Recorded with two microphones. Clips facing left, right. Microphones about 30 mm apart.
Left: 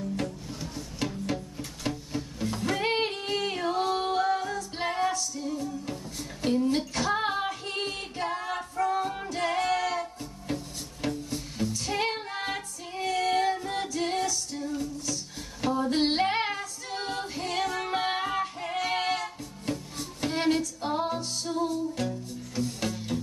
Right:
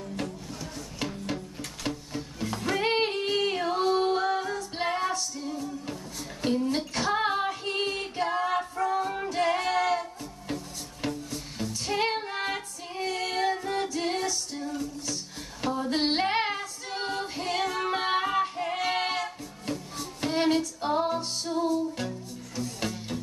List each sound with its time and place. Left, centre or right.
1.9 s music: centre
2.6 s singing: centre
4.7 s music: centre
6.4 s a sound: centre
6.9 s female singing: centre
8.8 s music: centre
9.2 s music: centre
11.7 s female singing: centre
15.6 s child singing: centre
21.5 s music: centre
23.1 s music: centre